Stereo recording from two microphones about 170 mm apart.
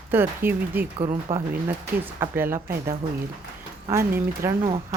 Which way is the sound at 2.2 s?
15° right (ahead or behind).